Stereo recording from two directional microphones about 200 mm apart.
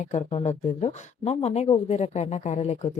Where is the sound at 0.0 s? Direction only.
35° left (ahead or behind).